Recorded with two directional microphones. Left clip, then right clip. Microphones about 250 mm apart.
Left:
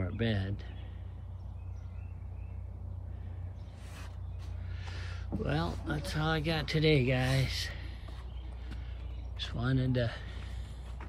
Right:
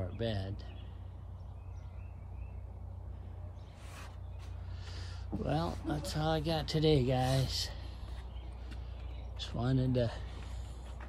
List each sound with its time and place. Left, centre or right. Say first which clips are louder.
0.2 s speech: left 3 dB; centre
4.8 s a sound: left 4 dB; centre
5.9 s speech: left 1 dB; centre
9.4 s speech: left 1 dB; centre